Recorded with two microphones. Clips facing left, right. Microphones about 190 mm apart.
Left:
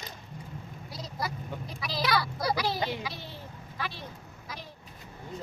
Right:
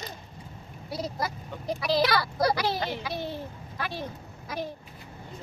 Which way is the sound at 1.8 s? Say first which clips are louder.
Right 5 dB; 60° right (ahead or behind).